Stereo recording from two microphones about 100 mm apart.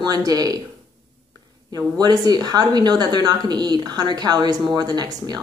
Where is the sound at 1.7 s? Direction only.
40° right (ahead or behind).